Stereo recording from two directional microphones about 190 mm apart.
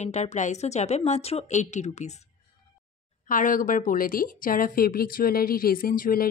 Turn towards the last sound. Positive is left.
turn(degrees=50)  # may be behind; listen again after turning